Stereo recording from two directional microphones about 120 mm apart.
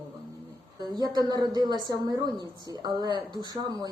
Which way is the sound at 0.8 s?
35° right (ahead or behind).